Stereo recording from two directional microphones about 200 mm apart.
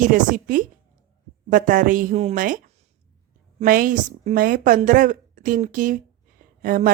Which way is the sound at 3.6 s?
45° right (ahead or behind).